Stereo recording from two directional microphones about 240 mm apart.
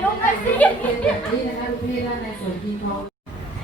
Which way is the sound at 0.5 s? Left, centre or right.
Centre.